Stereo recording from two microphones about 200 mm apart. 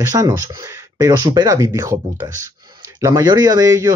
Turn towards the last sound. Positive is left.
turn(degrees=-15)  # may be behind; listen again after turning